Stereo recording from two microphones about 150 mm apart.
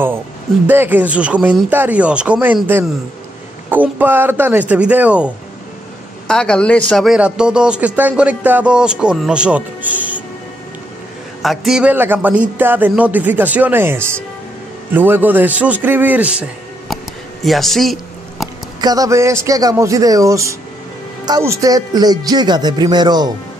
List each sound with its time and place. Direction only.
0.7 s speech: 10° right (ahead or behind)
6.2 s speech: 5° left (ahead or behind); by 10.2 s 10° right (ahead or behind)
11.4 s a man's voice: centre (ahead or behind)
18.8 s speech: 25° right (ahead or behind)